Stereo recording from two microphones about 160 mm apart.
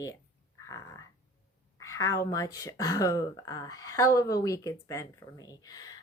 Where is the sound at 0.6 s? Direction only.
20° left (ahead or behind).